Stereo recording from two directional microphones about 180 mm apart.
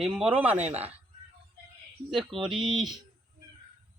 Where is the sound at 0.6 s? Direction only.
35° right (ahead or behind).